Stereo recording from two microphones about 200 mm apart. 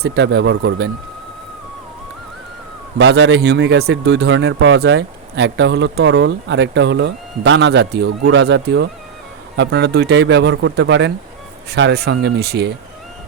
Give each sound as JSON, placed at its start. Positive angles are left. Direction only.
{"t": 0.0, "sound": "speech", "side_deg": -60}
{"t": 3.0, "sound": "speech", "side_deg": -65}